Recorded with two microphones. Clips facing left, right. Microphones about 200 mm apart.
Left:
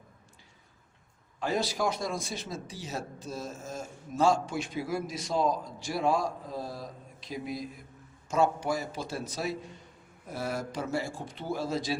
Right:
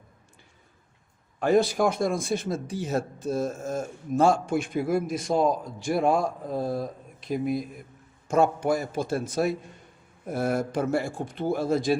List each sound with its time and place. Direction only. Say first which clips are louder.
1.4 s a man's voice: right 9 dB; 55° right (ahead or behind)